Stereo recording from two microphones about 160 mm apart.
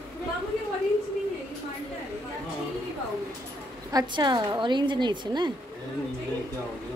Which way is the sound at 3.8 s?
25° right (ahead or behind).